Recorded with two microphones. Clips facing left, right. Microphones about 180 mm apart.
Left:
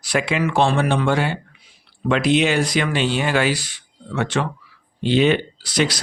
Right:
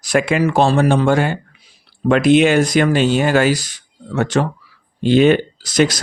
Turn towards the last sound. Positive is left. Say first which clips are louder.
# right 5 dB
turn(degrees=-45)  # may be behind; listen again after turning